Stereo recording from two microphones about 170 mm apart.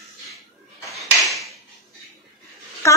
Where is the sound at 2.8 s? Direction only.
20° left (ahead or behind).